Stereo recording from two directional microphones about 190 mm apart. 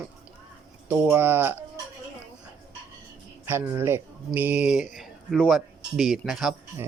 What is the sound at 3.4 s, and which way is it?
Speech, 10° right (ahead or behind).